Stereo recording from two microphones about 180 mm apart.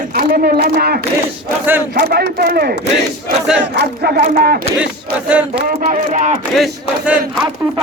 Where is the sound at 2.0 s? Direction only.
65° right (ahead or behind).